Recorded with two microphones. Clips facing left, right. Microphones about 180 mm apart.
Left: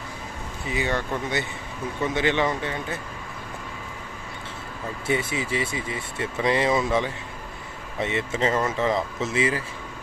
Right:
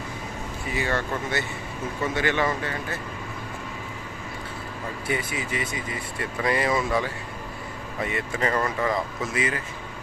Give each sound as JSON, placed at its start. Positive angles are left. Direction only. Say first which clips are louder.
{"t": 0.7, "sound": "speech", "louder": "left 1 dB", "side_deg": 20}
{"t": 5.0, "sound": "speech", "louder": "left 4 dB", "side_deg": 25}